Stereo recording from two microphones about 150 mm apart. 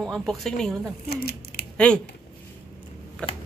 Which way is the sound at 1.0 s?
90° left.